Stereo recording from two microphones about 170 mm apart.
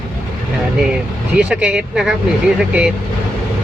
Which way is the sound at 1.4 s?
5° right (ahead or behind).